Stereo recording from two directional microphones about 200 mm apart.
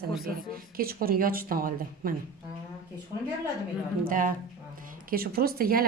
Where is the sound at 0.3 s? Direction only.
45° right (ahead or behind).